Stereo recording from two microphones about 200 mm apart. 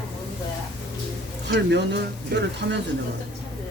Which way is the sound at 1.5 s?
60° right (ahead or behind).